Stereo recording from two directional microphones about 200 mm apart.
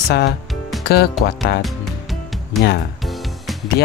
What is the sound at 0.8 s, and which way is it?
Speech, 50° left (ahead or behind).